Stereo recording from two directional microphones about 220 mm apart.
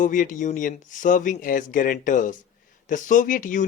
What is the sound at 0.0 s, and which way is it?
Speech, 35° left (ahead or behind).